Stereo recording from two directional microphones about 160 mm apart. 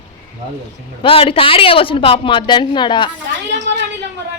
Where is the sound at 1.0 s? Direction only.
35° left (ahead or behind).